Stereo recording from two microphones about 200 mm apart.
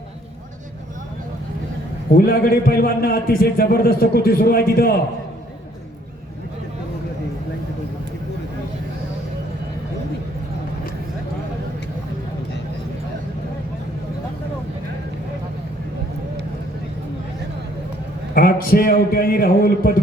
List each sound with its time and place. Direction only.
2.1 s a man's voice: 50° left (ahead or behind)
18.3 s a man's voice: 45° left (ahead or behind)